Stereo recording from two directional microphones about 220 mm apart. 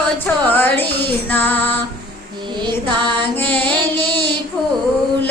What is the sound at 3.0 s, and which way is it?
Music, 20° right (ahead or behind).